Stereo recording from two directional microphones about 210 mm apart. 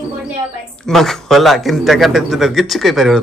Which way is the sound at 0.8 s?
Centre (ahead or behind).